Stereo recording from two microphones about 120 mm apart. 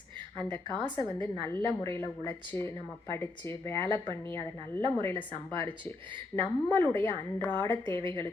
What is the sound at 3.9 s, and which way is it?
Speech, 40° right (ahead or behind).